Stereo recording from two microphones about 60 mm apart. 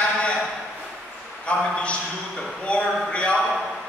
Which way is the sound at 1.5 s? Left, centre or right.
Centre.